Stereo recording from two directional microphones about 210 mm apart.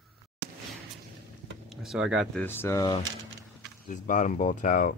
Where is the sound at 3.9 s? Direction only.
35° left (ahead or behind).